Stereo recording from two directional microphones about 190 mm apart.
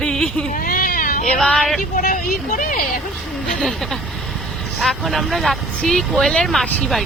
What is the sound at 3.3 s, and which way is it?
Speech, centre (ahead or behind).